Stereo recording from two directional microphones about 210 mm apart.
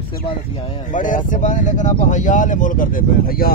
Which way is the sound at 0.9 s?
40° left (ahead or behind).